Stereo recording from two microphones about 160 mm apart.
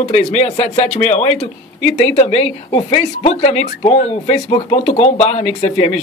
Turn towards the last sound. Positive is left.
turn(degrees=45)  # may be behind; listen again after turning